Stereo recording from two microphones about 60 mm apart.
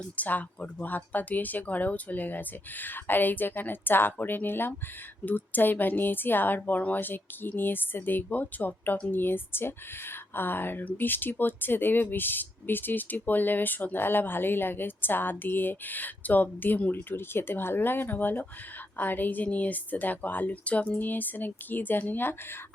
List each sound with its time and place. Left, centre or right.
0.0 s speech: left
6.6 s a woman's voice: left